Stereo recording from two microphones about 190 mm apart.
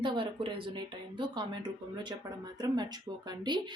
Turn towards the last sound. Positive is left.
turn(degrees=-25)  # may be behind; listen again after turning